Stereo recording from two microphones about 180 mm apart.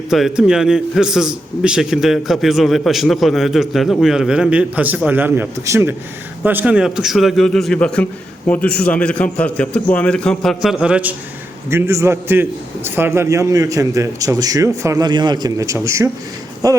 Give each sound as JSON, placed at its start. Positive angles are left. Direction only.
{"t": 0.1, "sound": "a man's voice", "side_deg": -5}